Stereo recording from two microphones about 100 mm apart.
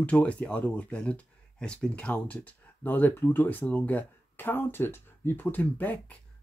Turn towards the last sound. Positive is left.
turn(degrees=15)  # may be behind; listen again after turning